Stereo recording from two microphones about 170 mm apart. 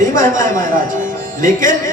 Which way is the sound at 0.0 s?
50° right (ahead or behind).